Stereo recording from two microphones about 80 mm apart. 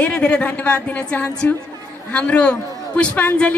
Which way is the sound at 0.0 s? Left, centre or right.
Centre.